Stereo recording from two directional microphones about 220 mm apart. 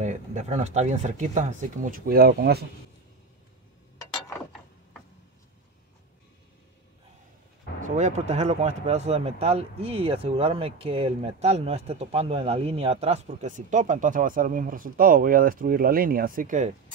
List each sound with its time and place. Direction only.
0.0 s speech: 30° right (ahead or behind)
7.8 s speech: 30° right (ahead or behind)